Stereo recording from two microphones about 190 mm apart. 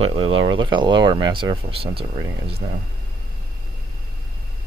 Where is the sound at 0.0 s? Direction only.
30° right (ahead or behind).